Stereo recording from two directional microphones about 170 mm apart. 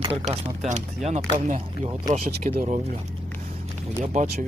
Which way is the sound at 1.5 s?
45° right (ahead or behind).